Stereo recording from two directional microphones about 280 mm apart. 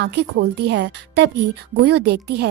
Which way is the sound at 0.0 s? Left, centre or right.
Right.